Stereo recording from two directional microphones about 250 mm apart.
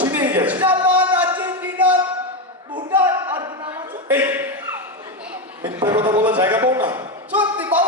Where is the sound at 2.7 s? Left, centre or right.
Centre.